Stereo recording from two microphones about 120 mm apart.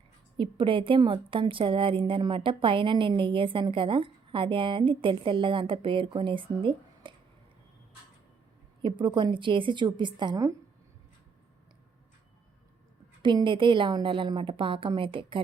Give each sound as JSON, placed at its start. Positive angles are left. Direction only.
{"t": 0.3, "sound": "a woman's voice", "side_deg": -45}
{"t": 8.8, "sound": "a woman's voice", "side_deg": -40}
{"t": 13.2, "sound": "a woman's voice", "side_deg": -40}